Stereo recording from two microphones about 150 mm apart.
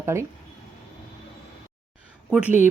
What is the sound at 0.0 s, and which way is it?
Speech, 20° right (ahead or behind).